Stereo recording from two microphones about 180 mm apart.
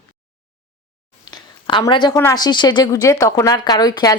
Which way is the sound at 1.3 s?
25° left (ahead or behind).